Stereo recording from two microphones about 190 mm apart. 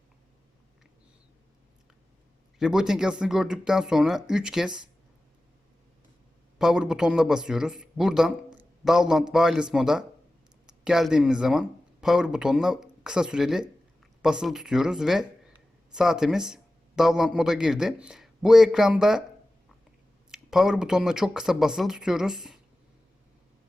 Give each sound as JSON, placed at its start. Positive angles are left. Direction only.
{"t": 2.6, "sound": "a man's voice", "side_deg": -5}
{"t": 6.6, "sound": "a man's voice", "side_deg": 0}
{"t": 20.3, "sound": "a man's voice", "side_deg": 0}